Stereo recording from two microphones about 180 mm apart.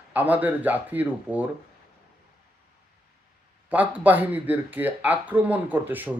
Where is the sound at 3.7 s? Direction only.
10° right (ahead or behind).